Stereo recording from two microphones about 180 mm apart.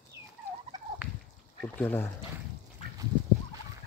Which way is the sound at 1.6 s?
10° left (ahead or behind).